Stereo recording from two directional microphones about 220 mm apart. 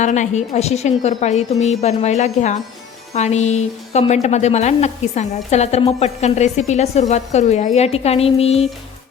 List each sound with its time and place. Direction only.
0.0 s a woman's voice: 35° left (ahead or behind)